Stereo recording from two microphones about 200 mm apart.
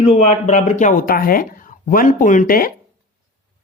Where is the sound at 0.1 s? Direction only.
35° left (ahead or behind).